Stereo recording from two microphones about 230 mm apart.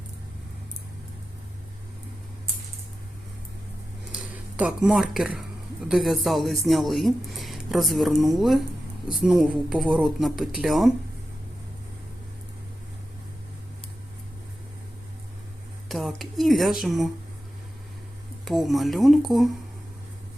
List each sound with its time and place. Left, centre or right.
4.1 s a sound: centre
5.9 s speech: centre
15.9 s speech: centre
18.4 s speech: centre